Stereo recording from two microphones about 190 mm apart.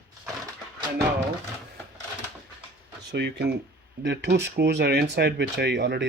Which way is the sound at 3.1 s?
65° right (ahead or behind).